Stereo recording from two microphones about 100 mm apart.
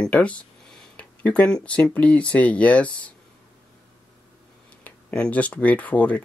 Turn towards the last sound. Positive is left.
turn(degrees=15)  # may be behind; listen again after turning